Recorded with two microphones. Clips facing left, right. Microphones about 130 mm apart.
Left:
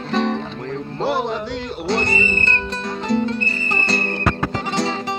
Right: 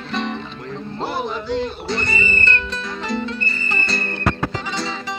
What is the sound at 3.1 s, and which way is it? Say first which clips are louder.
Music: left 5 dB; 40° left (ahead or behind).